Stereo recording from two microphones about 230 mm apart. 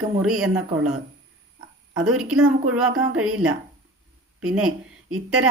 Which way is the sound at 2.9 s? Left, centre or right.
Right.